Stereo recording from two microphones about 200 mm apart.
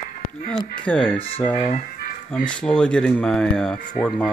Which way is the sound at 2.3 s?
5° left (ahead or behind).